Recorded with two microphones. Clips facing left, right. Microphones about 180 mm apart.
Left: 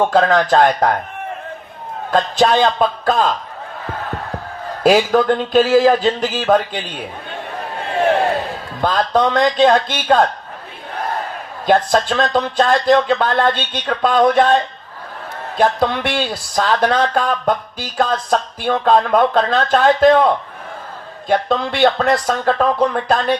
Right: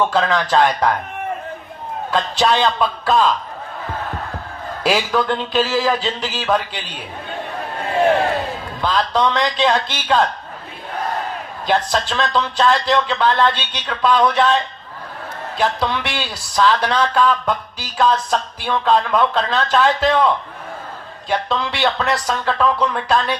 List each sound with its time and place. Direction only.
0.0 s speech: 50° left (ahead or behind)
2.0 s speech: 50° left (ahead or behind)
4.8 s speech: 50° left (ahead or behind)
8.8 s speech: 50° left (ahead or behind)
11.6 s speech: 50° left (ahead or behind)